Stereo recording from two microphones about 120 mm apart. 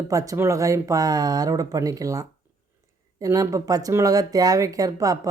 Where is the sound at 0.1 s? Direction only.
30° right (ahead or behind).